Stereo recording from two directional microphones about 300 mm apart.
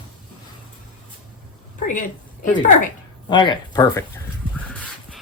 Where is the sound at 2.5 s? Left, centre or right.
Left.